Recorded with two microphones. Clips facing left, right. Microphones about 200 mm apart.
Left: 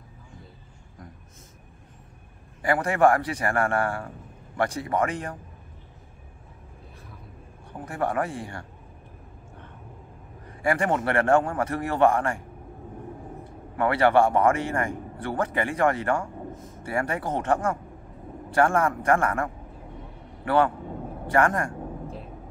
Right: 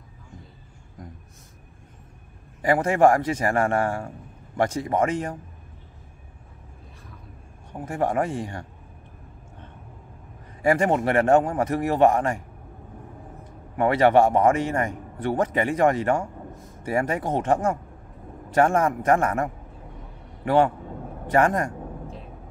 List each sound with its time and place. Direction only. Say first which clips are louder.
2.6 s a man's voice: right 3 dB; 25° right (ahead or behind)
7.8 s a man's voice: right 3 dB; 20° right (ahead or behind)
10.6 s a man's voice: right 4 dB; 20° right (ahead or behind)
13.7 s a man's voice: right 2 dB; 20° right (ahead or behind)